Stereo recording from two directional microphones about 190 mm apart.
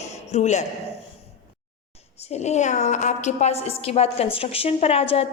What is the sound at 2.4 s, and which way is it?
A woman's voice, 40° left (ahead or behind).